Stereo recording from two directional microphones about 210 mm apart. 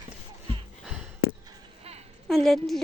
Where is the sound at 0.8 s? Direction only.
5° right (ahead or behind).